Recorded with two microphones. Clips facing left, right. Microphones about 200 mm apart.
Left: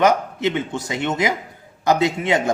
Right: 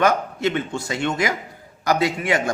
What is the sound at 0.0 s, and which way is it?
A man's voice, 20° left (ahead or behind).